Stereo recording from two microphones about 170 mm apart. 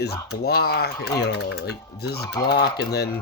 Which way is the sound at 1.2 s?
80° left.